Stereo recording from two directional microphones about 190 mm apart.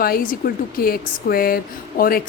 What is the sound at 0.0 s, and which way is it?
Speech, 50° left (ahead or behind).